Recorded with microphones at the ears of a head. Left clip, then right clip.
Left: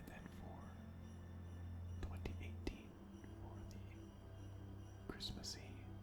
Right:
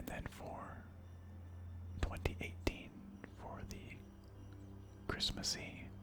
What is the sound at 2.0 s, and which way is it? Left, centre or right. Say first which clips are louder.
Whispering: right 11 dB; right.